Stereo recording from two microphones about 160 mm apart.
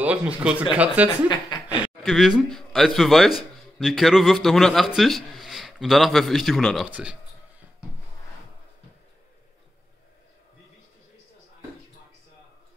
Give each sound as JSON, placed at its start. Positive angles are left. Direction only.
{"t": 0.0, "sound": "speech", "side_deg": -10}
{"t": 1.3, "sound": "speech", "side_deg": 30}
{"t": 2.0, "sound": "a man's voice", "side_deg": 0}